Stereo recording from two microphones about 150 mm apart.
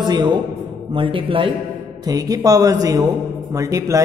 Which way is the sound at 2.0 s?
25° right (ahead or behind).